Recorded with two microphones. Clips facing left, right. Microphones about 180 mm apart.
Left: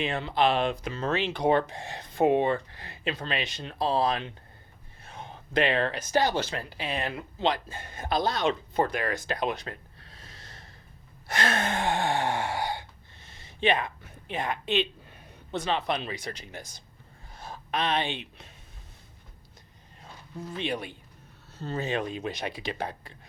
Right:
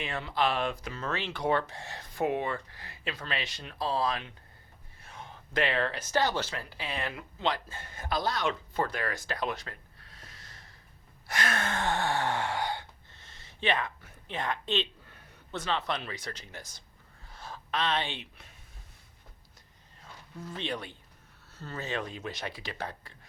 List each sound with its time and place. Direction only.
0.0 s speech: 25° left (ahead or behind)
7.1 s speech: 30° left (ahead or behind)
7.5 s speech: 15° left (ahead or behind)
11.3 s gasp: 25° left (ahead or behind)
17.3 s speech: 15° left (ahead or behind)
20.0 s a sound: 15° left (ahead or behind)
21.5 s speech: 20° left (ahead or behind)